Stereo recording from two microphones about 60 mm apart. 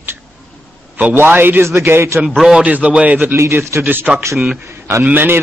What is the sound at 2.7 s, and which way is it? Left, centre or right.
Speech, right.